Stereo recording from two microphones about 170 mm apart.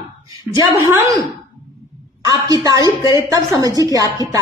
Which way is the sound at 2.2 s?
20° right (ahead or behind).